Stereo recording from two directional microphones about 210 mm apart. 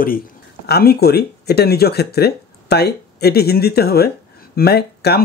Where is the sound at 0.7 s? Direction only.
50° left (ahead or behind).